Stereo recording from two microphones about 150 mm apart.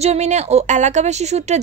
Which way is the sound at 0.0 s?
45° right (ahead or behind).